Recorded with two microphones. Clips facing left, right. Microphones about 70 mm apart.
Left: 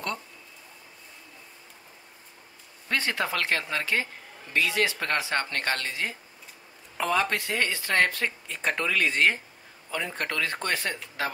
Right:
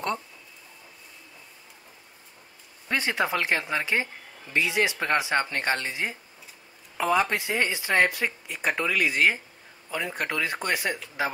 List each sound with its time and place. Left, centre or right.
2.9 s speech: centre